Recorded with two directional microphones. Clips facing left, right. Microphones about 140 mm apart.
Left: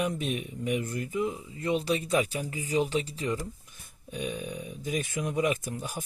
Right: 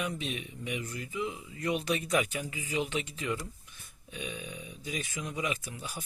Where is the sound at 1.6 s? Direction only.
30° left (ahead or behind).